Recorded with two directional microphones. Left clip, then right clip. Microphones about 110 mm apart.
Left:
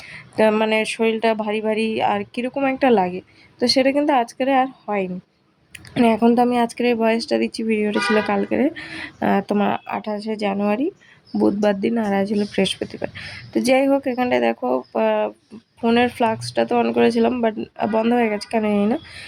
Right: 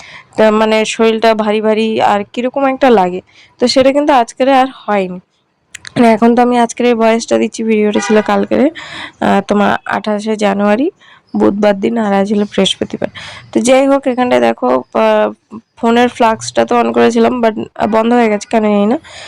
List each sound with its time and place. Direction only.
0.1 s speech: 30° right (ahead or behind)
11.6 s speech: 25° right (ahead or behind)